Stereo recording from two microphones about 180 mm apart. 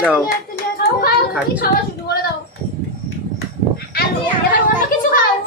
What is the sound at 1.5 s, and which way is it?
Speech, 65° left (ahead or behind).